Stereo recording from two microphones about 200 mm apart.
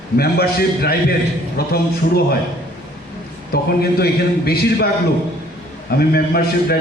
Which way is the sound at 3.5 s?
50° left (ahead or behind).